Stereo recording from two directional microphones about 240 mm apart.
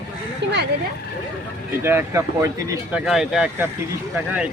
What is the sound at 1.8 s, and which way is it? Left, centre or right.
Speech, centre.